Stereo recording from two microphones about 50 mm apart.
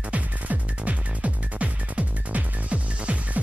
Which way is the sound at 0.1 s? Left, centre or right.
Right.